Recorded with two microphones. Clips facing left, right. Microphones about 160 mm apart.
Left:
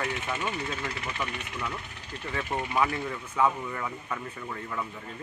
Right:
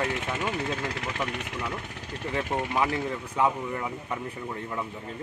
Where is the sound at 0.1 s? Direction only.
80° right.